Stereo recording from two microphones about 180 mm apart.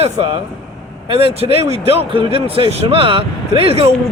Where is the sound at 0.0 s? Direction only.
30° right (ahead or behind).